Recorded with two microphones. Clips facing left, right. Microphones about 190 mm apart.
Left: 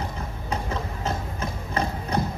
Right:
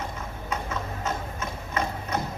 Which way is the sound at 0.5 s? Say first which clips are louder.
Left 2 dB; 30° left (ahead or behind).